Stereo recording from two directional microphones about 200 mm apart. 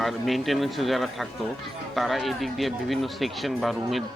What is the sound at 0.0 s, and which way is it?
Speech, centre (ahead or behind).